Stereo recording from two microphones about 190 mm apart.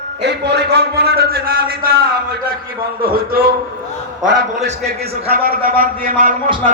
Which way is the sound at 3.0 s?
50° right (ahead or behind).